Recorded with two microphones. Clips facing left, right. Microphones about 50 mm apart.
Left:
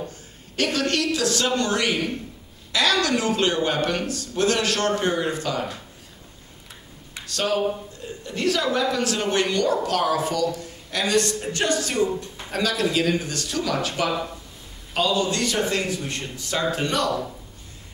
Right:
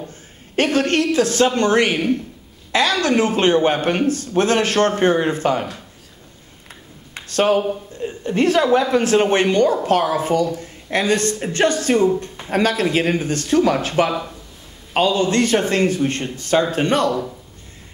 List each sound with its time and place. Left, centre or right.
0.6 s a woman's voice: right
7.2 s a woman's voice: right